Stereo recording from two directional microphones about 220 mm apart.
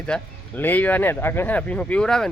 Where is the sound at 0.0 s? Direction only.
5° left (ahead or behind).